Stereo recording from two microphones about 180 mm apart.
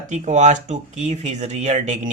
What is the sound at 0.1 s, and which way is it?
Speech, 40° right (ahead or behind).